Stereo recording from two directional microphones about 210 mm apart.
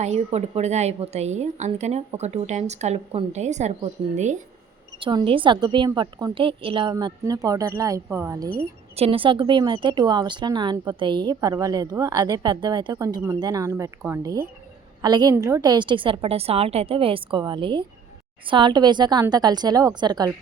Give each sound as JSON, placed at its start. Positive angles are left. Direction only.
{"t": 0.0, "sound": "a woman's voice", "side_deg": -30}
{"t": 4.9, "sound": "speech", "side_deg": -25}
{"t": 9.0, "sound": "speech", "side_deg": -25}